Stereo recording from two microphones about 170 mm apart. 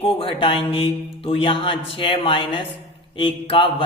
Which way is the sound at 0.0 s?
35° left (ahead or behind).